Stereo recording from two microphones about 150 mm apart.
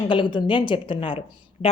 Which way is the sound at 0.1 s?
35° left (ahead or behind).